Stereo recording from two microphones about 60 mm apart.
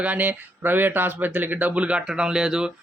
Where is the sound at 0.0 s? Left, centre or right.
Right.